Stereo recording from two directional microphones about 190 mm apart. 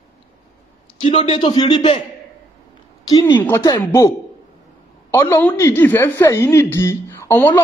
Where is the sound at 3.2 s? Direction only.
10° left (ahead or behind).